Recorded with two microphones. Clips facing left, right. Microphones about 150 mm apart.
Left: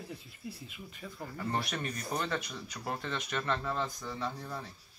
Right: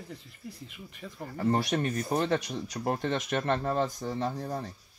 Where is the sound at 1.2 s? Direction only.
35° right (ahead or behind).